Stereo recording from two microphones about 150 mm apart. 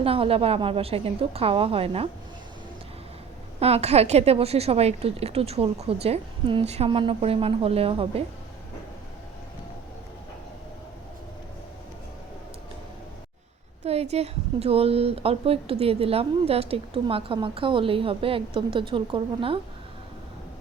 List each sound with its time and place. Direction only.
0.0 s speech: 40° right (ahead or behind)
3.6 s speech: 45° right (ahead or behind)
13.8 s speech: 45° right (ahead or behind)